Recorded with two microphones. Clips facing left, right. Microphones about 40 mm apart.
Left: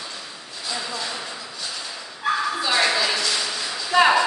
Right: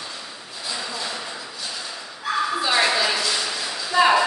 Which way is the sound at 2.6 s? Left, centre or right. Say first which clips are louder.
Right 1 dB; centre.